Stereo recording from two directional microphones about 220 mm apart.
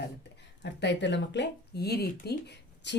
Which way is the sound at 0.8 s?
55° left (ahead or behind).